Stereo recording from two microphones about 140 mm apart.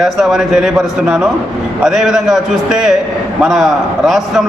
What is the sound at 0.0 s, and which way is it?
A man's voice, centre (ahead or behind).